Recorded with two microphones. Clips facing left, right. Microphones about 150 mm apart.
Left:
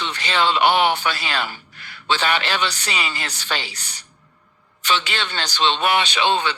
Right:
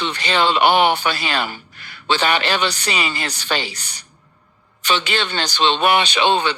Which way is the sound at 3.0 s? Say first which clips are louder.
Right 4 dB; 65° right (ahead or behind).